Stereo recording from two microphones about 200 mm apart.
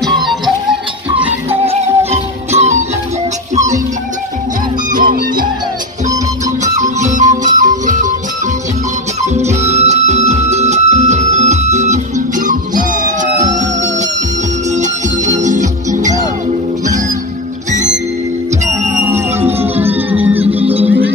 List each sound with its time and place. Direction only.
0.0 s music: centre (ahead or behind)
1.7 s music: 30° right (ahead or behind)
4.9 s music: 45° right (ahead or behind)
6.6 s music: 35° right (ahead or behind)
9.2 s music: 35° right (ahead or behind)
19.0 s music: 10° right (ahead or behind)
20.6 s music: 30° right (ahead or behind)